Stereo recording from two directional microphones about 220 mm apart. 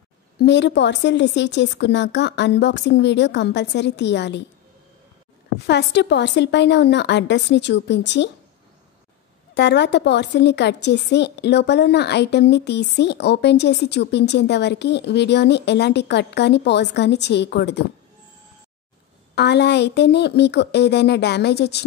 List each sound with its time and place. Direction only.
0.4 s a woman's voice: 50° left (ahead or behind)
5.7 s a woman's voice: 50° left (ahead or behind)
9.5 s a woman's voice: 50° left (ahead or behind)
19.3 s a woman's voice: 50° left (ahead or behind)